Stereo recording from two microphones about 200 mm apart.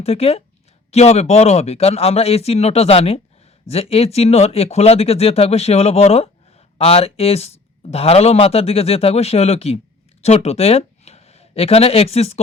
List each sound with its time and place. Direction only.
0.0 s speech: 30° left (ahead or behind)